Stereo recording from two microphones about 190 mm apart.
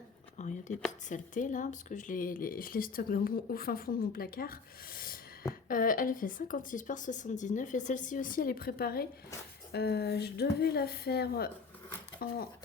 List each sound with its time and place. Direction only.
0.3 s a woman's voice: 40° left (ahead or behind)